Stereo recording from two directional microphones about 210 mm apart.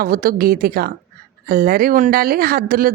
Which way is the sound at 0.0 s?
45° right (ahead or behind).